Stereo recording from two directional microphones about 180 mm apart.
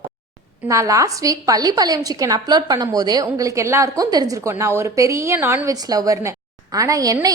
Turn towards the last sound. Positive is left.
turn(degrees=-20)  # may be behind; listen again after turning